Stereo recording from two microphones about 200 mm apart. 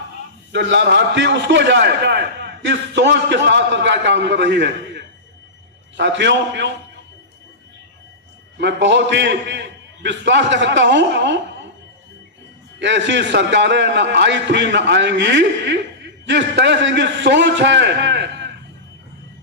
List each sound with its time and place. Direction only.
0.5 s a man's voice: 65° right (ahead or behind)
8.5 s a man's voice: 60° right (ahead or behind)
12.8 s a man's voice: 65° right (ahead or behind)